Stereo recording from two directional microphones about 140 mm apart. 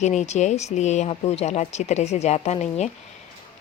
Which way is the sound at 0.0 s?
55° left (ahead or behind).